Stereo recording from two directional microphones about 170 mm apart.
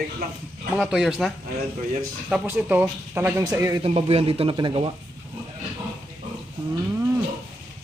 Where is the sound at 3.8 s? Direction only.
35° right (ahead or behind).